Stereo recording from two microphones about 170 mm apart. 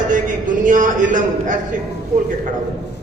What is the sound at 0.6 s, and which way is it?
A man's voice, 50° right (ahead or behind).